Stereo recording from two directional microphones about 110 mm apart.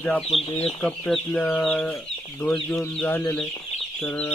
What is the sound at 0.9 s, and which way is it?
Speech, 10° left (ahead or behind).